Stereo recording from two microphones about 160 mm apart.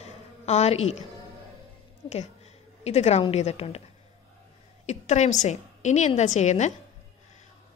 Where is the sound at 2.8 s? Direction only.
40° left (ahead or behind).